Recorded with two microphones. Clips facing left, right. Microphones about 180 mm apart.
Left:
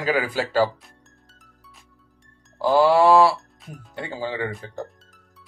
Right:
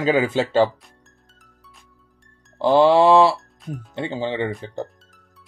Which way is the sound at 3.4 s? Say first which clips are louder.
Right 9 dB; centre (ahead or behind).